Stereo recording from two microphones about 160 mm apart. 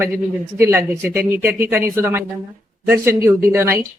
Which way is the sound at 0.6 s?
15° right (ahead or behind).